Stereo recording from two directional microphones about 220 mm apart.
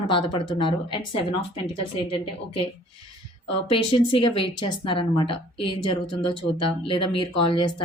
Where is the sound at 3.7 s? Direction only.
25° left (ahead or behind).